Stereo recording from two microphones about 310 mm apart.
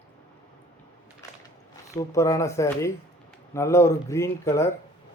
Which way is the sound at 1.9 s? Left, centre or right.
Centre.